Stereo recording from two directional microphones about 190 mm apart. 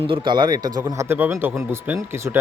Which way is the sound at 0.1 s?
25° right (ahead or behind).